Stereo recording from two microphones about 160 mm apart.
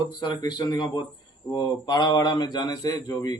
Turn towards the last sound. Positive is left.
turn(degrees=25)  # may be behind; listen again after turning